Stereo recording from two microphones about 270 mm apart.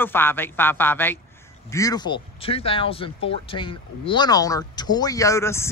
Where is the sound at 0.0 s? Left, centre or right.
Centre.